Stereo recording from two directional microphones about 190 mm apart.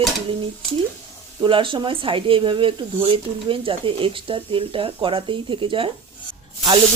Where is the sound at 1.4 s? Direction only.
25° right (ahead or behind).